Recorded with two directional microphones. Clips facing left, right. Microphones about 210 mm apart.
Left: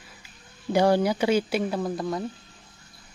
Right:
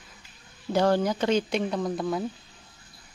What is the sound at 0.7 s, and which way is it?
Speech, 10° left (ahead or behind).